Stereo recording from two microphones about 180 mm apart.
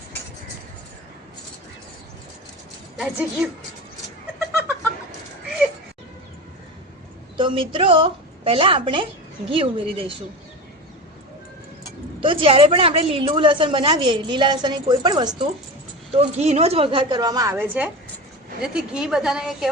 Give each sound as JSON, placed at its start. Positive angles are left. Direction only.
{"t": 3.0, "sound": "a woman's voice", "side_deg": -5}
{"t": 7.3, "sound": "a woman's voice", "side_deg": -30}
{"t": 12.2, "sound": "a woman's voice", "side_deg": -30}
{"t": 16.1, "sound": "a woman's voice", "side_deg": -35}